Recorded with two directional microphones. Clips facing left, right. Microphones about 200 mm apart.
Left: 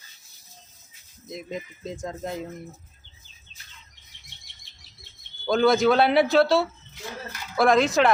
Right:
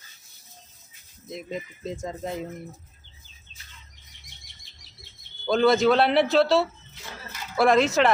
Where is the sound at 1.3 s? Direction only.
Centre (ahead or behind).